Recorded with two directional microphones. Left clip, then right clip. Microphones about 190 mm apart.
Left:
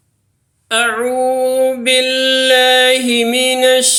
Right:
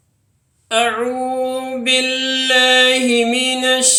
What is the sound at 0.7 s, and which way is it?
Female singing, 20° left (ahead or behind).